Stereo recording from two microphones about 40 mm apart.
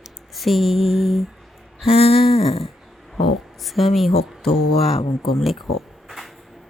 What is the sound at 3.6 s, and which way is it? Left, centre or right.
Speech, centre.